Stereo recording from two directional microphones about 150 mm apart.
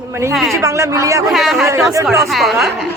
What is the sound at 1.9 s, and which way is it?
Speech, 20° right (ahead or behind).